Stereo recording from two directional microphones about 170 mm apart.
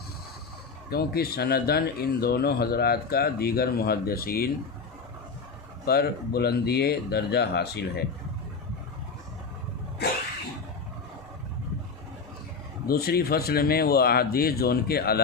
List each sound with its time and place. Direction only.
0.9 s speech: 65° left (ahead or behind)
5.8 s speech: 65° left (ahead or behind)
10.0 s a sound: 70° left (ahead or behind)
12.9 s speech: 65° left (ahead or behind)